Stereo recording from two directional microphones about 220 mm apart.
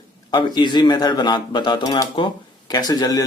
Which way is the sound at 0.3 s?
20° left (ahead or behind).